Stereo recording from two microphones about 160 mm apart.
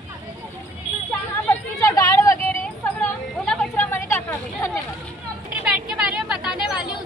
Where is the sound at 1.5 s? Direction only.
20° left (ahead or behind).